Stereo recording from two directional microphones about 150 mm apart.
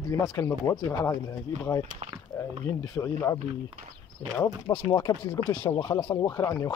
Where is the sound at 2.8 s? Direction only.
25° left (ahead or behind).